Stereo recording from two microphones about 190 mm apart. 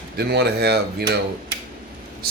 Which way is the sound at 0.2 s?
60° right (ahead or behind).